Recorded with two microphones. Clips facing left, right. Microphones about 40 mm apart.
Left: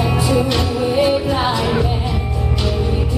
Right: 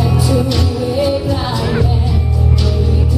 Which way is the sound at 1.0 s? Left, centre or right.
Centre.